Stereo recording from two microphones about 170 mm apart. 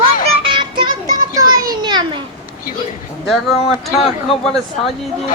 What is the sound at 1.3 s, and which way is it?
Children playing, 20° right (ahead or behind).